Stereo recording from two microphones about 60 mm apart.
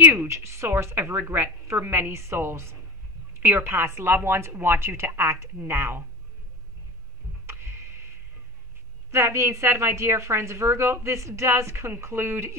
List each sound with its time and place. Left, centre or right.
0.3 s a woman's voice: right
7.4 s a sound: right
9.1 s a woman's voice: right